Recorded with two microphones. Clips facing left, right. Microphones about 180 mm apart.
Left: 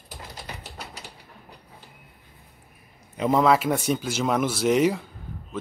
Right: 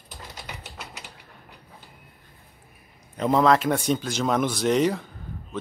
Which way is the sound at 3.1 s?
5° left (ahead or behind).